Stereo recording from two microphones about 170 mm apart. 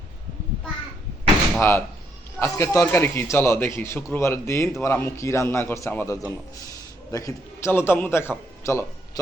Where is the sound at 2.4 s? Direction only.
15° left (ahead or behind).